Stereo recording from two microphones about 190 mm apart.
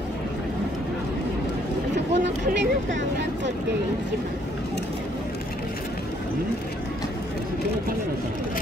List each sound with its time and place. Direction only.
2.1 s vehicle: 65° right (ahead or behind)